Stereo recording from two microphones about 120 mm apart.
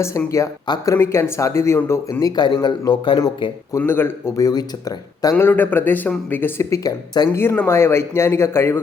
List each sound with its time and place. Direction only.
0.9 s speech: 20° left (ahead or behind)
2.3 s speech: 35° left (ahead or behind)
3.8 s speech: 15° left (ahead or behind)
4.4 s speech: 30° left (ahead or behind)
5.4 s speech: 15° left (ahead or behind)
7.3 s speech: 15° left (ahead or behind)